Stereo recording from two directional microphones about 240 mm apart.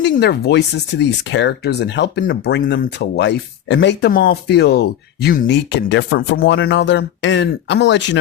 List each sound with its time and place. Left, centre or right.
0.0 s speech: left